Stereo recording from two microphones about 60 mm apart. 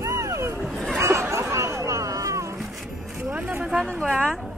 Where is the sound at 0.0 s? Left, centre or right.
Right.